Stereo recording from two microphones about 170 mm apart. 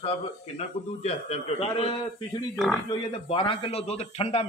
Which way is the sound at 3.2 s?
35° left (ahead or behind).